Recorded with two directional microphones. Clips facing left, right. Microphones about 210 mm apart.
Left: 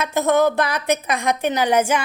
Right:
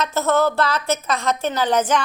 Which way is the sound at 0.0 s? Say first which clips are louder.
Left 2 dB; 15° left (ahead or behind).